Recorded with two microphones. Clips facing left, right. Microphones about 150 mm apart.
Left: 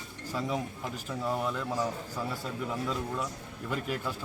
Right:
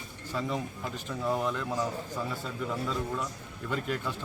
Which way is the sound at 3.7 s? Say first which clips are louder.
Right 1 dB; 5° left (ahead or behind).